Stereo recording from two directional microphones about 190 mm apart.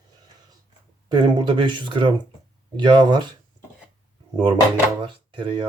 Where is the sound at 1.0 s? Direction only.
25° right (ahead or behind).